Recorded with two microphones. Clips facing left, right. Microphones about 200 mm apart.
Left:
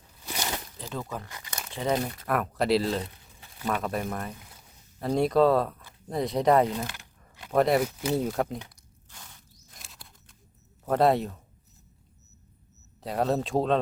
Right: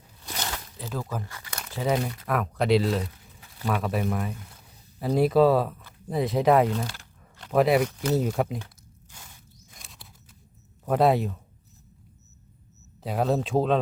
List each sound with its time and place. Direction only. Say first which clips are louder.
0.3 s a sound: left 1 dB; 15° left (ahead or behind)
0.8 s speech: right 2 dB; 5° right (ahead or behind)
1.5 s crumpling: right 2 dB; 5° right (ahead or behind)
2.2 s speech: right 1 dB; centre (ahead or behind)
6.7 s biting: right 3 dB; 15° left (ahead or behind)
7.5 s speech: right 2 dB; centre (ahead or behind)
9.6 s a sound: even; centre (ahead or behind)
10.8 s speech: right 1 dB; centre (ahead or behind)
13.0 s speech: right 1 dB; centre (ahead or behind)